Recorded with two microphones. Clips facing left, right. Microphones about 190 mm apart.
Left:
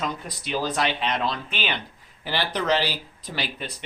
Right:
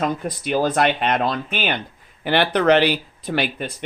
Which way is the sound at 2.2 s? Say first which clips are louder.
Right 9 dB; 60° right (ahead or behind).